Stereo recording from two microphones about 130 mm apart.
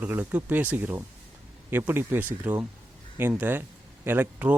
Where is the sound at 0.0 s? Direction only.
15° right (ahead or behind).